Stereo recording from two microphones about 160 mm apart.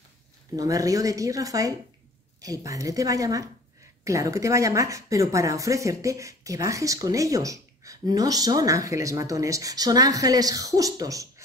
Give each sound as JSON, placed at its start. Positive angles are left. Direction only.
{"t": 0.6, "sound": "a woman's voice", "side_deg": -20}